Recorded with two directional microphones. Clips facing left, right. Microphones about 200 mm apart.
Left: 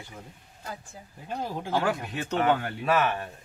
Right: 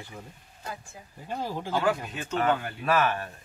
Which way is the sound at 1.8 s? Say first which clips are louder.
Right 1 dB; 65° left (ahead or behind).